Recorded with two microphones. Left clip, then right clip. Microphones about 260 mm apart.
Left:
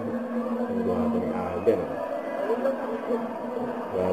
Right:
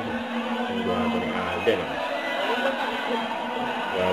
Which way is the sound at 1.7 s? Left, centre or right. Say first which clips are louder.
Left 1 dB; centre.